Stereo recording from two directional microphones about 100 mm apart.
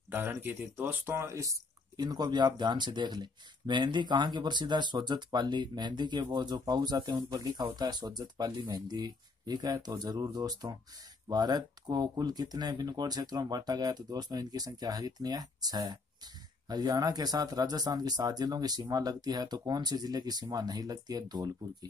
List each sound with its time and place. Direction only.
0.1 s speech: 20° right (ahead or behind); by 21.5 s 45° right (ahead or behind)